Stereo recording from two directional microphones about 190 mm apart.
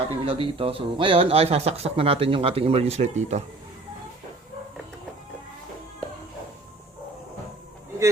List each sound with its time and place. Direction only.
0.1 s speech: 30° right (ahead or behind)